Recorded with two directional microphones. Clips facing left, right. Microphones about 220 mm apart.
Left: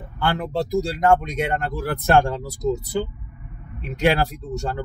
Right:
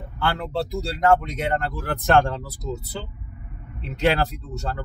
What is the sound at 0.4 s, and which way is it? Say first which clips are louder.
Speech: left 4 dB; 15° left (ahead or behind).